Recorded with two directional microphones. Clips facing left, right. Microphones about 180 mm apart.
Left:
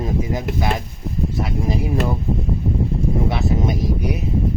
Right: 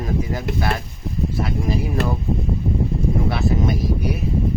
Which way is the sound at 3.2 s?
20° left (ahead or behind).